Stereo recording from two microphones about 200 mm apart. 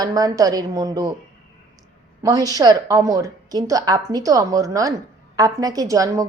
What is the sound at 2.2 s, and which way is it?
A woman's voice, 20° right (ahead or behind).